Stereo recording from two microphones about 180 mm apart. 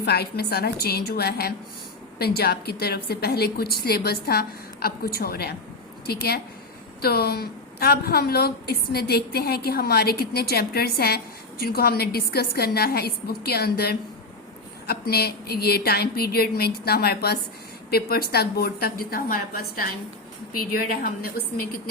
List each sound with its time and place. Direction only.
0.0 s a woman's voice: 60° left (ahead or behind)